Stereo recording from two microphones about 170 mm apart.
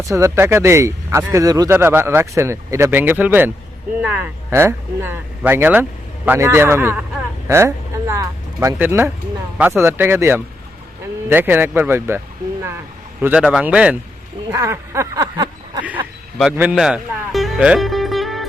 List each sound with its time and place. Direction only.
0.0 s speech: 20° right (ahead or behind)
7.4 s vehicle: 15° right (ahead or behind)
8.6 s speech: 15° right (ahead or behind)
13.2 s speech: 5° right (ahead or behind)
14.5 s a sound: 15° right (ahead or behind)
16.4 s speech: 5° right (ahead or behind)